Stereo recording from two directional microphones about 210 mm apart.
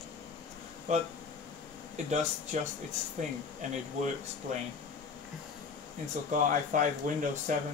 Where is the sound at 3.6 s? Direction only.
35° right (ahead or behind).